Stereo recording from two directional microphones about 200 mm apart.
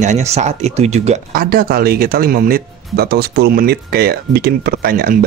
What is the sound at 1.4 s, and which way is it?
Speech, 50° right (ahead or behind).